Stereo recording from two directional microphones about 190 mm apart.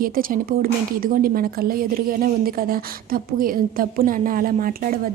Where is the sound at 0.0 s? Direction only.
50° right (ahead or behind).